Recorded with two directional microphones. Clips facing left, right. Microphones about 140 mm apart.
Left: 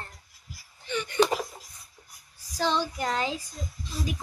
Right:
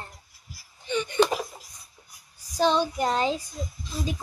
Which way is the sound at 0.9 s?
20° right (ahead or behind).